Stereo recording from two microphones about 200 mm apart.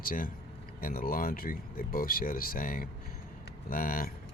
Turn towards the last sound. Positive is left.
turn(degrees=45)  # may be behind; listen again after turning